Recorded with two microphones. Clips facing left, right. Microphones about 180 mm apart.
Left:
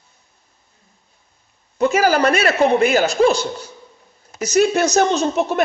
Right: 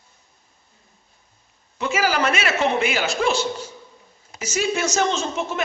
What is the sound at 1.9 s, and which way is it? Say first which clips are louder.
A man's voice: left 4 dB; 40° left (ahead or behind).